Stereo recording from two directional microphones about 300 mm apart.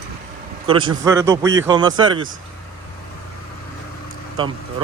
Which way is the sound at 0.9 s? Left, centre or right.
Centre.